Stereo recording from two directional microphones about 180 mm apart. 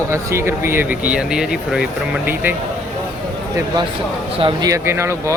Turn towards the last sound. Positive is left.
turn(degrees=-15)  # may be behind; listen again after turning